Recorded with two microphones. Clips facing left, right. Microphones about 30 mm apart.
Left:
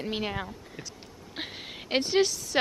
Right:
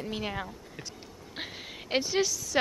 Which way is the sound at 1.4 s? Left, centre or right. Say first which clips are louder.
Left 2 dB; centre.